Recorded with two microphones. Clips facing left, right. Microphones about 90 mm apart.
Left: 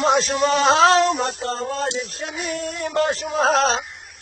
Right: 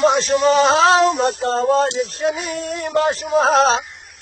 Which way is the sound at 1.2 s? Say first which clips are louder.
Right 6 dB; 50° right (ahead or behind).